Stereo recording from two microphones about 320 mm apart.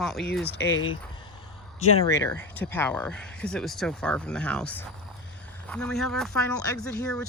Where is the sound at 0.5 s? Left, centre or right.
Left.